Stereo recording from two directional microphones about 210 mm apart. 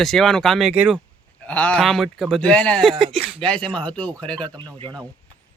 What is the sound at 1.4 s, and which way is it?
Speech, 5° left (ahead or behind).